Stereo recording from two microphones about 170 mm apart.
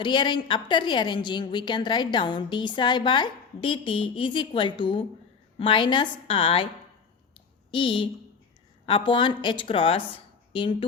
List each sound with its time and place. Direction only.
0.0 s a woman's voice: 25° left (ahead or behind)
7.7 s a woman's voice: 30° left (ahead or behind)